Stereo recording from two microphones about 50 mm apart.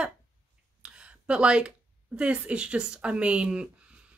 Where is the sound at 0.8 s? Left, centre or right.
Centre.